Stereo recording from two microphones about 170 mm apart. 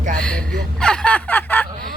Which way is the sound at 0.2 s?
5° left (ahead or behind).